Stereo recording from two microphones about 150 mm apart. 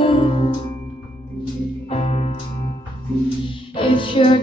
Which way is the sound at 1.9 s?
40° left (ahead or behind).